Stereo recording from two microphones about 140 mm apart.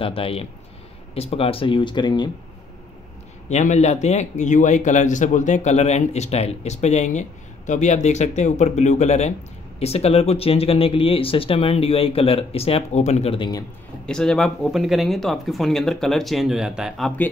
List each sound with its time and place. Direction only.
0.0 s speech: 40° left (ahead or behind)
3.4 s speech: 55° left (ahead or behind)
14.0 s speech: 5° left (ahead or behind)